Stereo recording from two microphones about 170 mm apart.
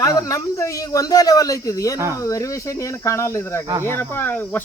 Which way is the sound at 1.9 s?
15° right (ahead or behind).